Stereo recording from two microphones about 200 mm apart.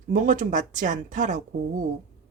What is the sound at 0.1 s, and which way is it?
Speech, 40° right (ahead or behind).